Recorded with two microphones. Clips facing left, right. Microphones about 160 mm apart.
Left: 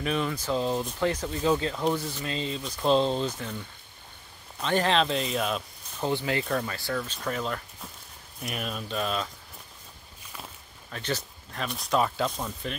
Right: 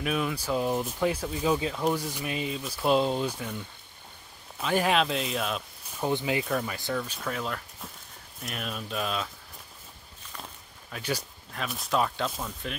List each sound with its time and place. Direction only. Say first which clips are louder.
0.0 s speech: left 1 dB; 5° right (ahead or behind)
4.6 s speech: even; 5° right (ahead or behind)
6.0 s speech: even; 15° right (ahead or behind)
6.4 s speech: even; 5° right (ahead or behind)
10.9 s speech: even; 10° right (ahead or behind)